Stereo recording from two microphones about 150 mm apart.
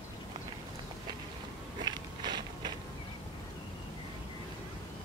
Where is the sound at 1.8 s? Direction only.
30° right (ahead or behind).